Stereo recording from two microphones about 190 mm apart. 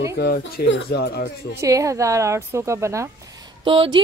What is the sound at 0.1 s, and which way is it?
Speech, 65° left (ahead or behind).